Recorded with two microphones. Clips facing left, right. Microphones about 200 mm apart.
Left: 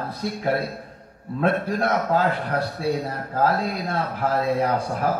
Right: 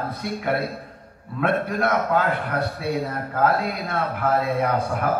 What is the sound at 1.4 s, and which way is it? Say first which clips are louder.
A man's voice: even; 35° left (ahead or behind).